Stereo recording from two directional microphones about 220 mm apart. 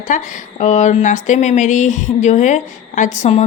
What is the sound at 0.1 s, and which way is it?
Speech, 35° left (ahead or behind).